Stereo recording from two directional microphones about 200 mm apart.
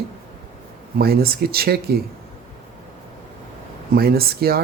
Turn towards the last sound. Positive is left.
turn(degrees=-50)  # may be behind; listen again after turning